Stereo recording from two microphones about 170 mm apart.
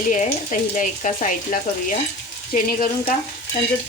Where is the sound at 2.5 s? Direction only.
55° left (ahead or behind).